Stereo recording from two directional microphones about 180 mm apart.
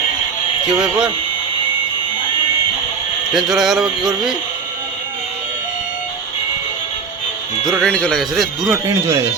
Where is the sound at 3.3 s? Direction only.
Centre (ahead or behind).